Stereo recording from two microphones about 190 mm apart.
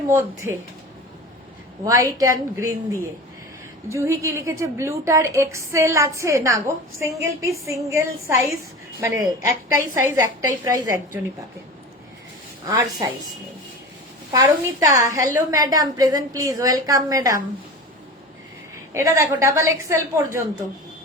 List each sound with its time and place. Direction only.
0.1 s a woman's voice: 15° right (ahead or behind)
1.8 s a woman's voice: 20° right (ahead or behind)
3.8 s a woman's voice: 15° right (ahead or behind)
12.6 s a woman's voice: 20° right (ahead or behind)
14.3 s a woman's voice: 20° right (ahead or behind)
18.9 s a woman's voice: 15° right (ahead or behind)